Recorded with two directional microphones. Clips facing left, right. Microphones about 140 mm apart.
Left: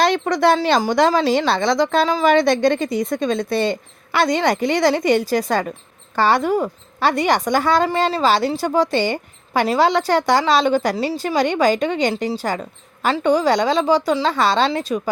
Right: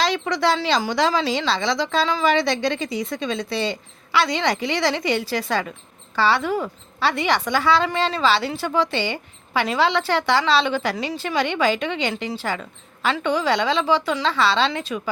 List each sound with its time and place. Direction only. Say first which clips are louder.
0.0 s a woman's voice: left 5 dB; 50° left (ahead or behind)